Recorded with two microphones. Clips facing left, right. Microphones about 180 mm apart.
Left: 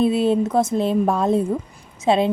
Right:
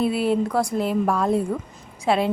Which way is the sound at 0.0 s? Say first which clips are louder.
Left 3 dB; 20° left (ahead or behind).